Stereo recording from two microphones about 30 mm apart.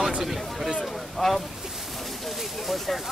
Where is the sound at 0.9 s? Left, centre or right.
Centre.